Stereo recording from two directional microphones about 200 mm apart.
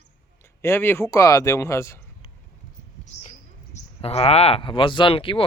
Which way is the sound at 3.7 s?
30° left (ahead or behind).